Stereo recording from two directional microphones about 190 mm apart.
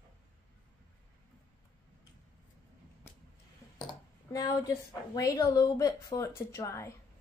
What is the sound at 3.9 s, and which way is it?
Speech, 20° left (ahead or behind).